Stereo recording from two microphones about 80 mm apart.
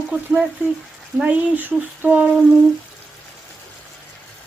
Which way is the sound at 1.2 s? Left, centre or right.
Right.